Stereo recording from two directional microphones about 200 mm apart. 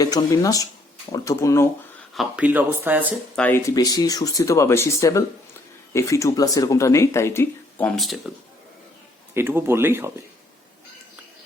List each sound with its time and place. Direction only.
0.0 s speech: 20° left (ahead or behind)
2.1 s speech: 5° right (ahead or behind)
3.3 s speech: 10° left (ahead or behind)
9.3 s speech: 10° right (ahead or behind)